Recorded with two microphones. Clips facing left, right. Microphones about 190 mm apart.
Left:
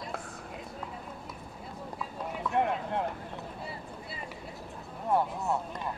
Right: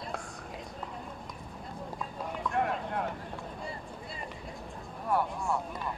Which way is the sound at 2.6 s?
25° left (ahead or behind).